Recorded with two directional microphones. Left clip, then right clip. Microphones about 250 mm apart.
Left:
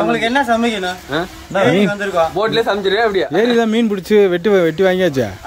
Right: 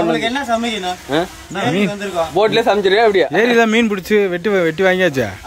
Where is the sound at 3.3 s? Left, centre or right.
Centre.